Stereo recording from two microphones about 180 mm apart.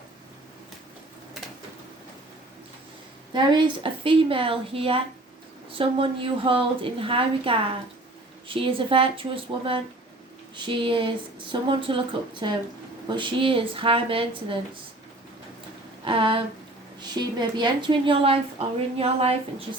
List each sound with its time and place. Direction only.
3.3 s a woman's voice: 30° right (ahead or behind)
16.0 s a woman's voice: 30° right (ahead or behind)